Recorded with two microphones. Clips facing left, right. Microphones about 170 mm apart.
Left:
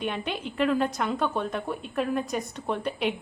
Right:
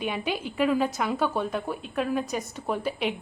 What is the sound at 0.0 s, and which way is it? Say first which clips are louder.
A woman's voice: right 1 dB; 5° right (ahead or behind).